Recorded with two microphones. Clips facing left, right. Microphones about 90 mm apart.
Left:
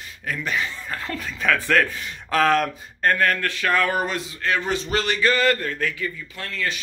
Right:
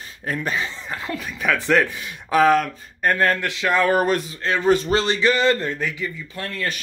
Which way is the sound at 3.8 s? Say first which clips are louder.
Right 5 dB; 45° right (ahead or behind).